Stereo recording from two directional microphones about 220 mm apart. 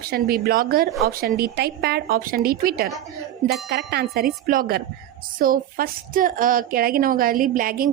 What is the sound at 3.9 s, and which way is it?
A woman's voice, 50° right (ahead or behind).